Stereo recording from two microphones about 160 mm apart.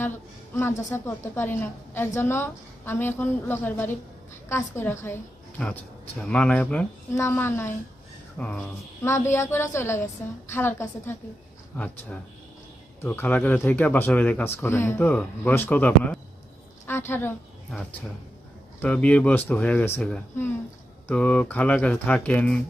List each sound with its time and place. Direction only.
0.9 s a woman's voice: 15° left (ahead or behind)
18.8 s a woman's voice: 10° left (ahead or behind)